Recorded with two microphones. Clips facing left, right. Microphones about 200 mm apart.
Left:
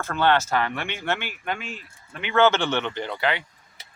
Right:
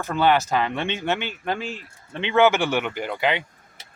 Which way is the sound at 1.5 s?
35° right (ahead or behind).